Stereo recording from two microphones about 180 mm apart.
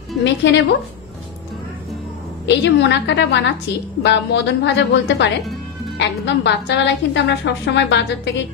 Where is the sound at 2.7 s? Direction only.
80° left.